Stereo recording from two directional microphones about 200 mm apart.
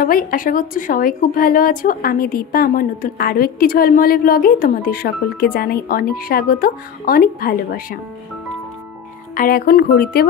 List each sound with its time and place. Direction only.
0.0 s a woman's voice: 45° left (ahead or behind)
9.3 s a woman's voice: 45° left (ahead or behind)